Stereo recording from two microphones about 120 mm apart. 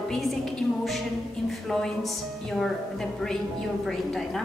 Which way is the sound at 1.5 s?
Centre (ahead or behind).